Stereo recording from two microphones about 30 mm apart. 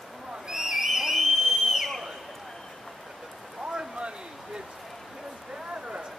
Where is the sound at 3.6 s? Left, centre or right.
Right.